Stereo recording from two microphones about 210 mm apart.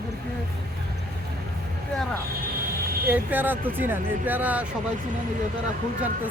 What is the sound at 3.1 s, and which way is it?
Speech, 10° right (ahead or behind).